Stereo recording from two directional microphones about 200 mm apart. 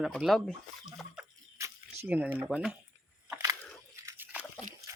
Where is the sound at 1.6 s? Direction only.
15° right (ahead or behind).